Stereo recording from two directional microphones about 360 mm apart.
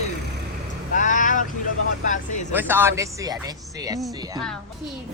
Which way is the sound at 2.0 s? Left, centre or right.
Left.